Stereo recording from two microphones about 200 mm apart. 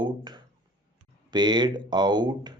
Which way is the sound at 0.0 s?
20° right (ahead or behind).